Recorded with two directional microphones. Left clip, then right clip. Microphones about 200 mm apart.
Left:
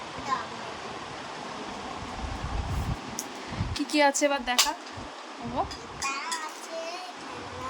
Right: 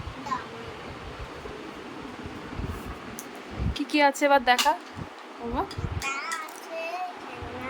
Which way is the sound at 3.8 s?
10° right (ahead or behind).